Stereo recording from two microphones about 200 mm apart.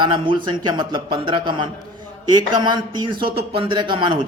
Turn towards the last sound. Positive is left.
turn(degrees=-25)  # may be behind; listen again after turning